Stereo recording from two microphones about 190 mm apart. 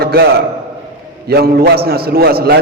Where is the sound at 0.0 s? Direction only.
55° right (ahead or behind).